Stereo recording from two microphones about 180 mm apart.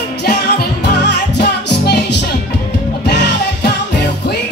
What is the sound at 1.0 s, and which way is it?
Music, 70° left (ahead or behind).